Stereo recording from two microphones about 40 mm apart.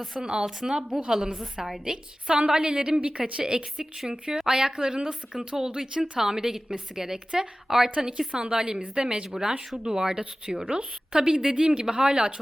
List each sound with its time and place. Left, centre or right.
0.2 s a woman's voice: centre
2.3 s a woman's voice: right
8.3 s a woman's voice: right